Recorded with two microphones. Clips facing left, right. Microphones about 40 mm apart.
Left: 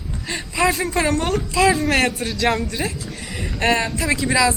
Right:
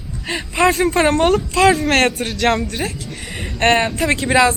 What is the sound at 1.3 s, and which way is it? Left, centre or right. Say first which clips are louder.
Speech: right 4 dB; centre.